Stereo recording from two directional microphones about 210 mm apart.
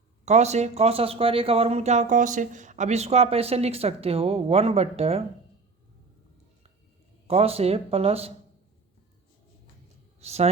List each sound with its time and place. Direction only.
0.3 s speech: 30° right (ahead or behind)
7.3 s speech: 30° right (ahead or behind)
10.2 s speech: 30° right (ahead or behind)